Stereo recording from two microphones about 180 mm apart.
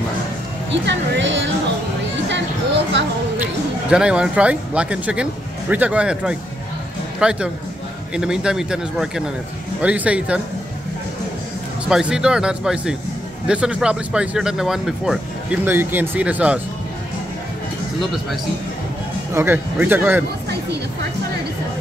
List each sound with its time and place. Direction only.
0.8 s speech: 85° right
3.9 s speech: 5° right (ahead or behind)
11.9 s speech: 5° right (ahead or behind)
19.3 s speech: 10° right (ahead or behind)